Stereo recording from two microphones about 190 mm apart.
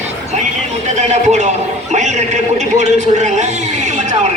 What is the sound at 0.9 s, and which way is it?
A man's voice, 35° right (ahead or behind).